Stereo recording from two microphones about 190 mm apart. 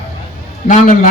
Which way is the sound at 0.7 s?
40° left (ahead or behind).